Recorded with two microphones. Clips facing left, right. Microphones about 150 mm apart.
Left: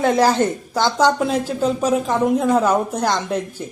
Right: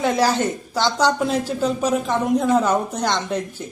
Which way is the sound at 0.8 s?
5° left (ahead or behind).